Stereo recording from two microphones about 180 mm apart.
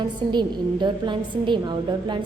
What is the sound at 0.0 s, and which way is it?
A woman's voice, 25° right (ahead or behind).